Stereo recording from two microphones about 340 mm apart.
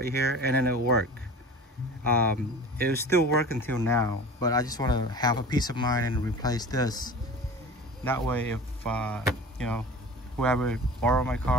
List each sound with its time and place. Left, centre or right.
0.0 s speech: right
3.0 s speech: centre